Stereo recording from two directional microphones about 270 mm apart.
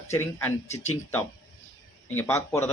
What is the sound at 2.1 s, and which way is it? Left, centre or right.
Speech, centre.